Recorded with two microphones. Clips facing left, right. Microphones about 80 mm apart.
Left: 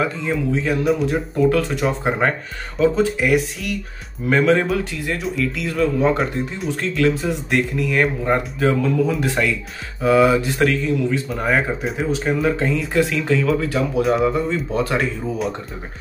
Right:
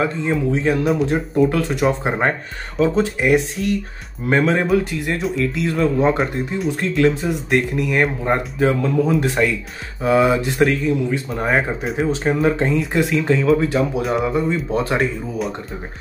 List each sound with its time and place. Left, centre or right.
0.0 s speech: right
14.0 s speech: centre
14.7 s speech: right
15.0 s speech: centre